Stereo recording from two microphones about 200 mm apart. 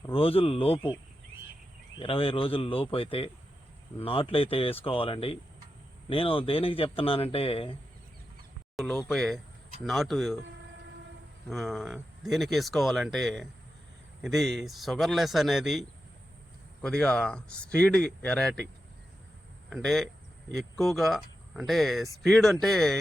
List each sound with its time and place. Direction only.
0.1 s speech: 30° left (ahead or behind)
2.0 s speech: 25° left (ahead or behind)
8.7 s speech: centre (ahead or behind)
11.4 s speech: centre (ahead or behind)
16.8 s speech: 5° left (ahead or behind)
19.7 s speech: centre (ahead or behind)